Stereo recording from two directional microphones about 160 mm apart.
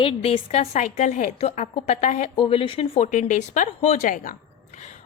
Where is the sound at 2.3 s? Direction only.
30° left (ahead or behind); by 4.3 s 55° left (ahead or behind).